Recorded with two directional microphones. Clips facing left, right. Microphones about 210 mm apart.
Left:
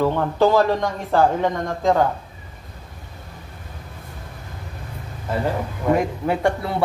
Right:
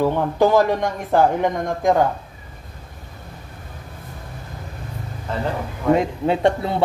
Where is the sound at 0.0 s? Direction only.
15° right (ahead or behind).